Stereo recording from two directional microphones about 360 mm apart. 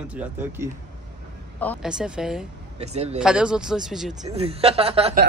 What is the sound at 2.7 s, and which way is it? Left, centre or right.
Speech, centre.